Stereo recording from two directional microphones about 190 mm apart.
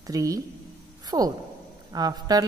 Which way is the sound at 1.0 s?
20° right (ahead or behind).